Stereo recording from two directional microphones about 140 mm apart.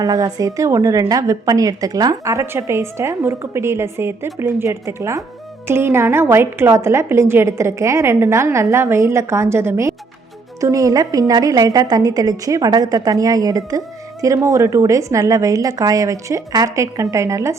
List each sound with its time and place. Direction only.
0.0 s a woman's voice: 25° right (ahead or behind)